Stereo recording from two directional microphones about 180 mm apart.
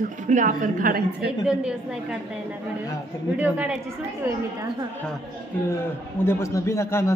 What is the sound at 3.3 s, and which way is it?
Speech, 10° right (ahead or behind).